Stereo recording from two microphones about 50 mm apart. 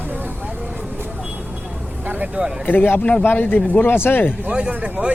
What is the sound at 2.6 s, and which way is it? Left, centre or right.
Speech, left.